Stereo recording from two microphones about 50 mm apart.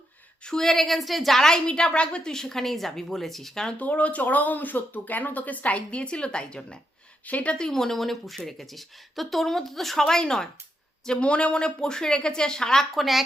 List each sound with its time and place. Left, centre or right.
0.4 s a woman's voice: centre
3.8 s speech: left
7.3 s speech: left
7.5 s a woman's voice: centre
11.2 s a woman's voice: left; by 13.2 s centre